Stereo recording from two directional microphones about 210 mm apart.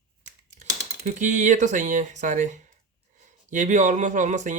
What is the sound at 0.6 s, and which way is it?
Speech, 35° right (ahead or behind).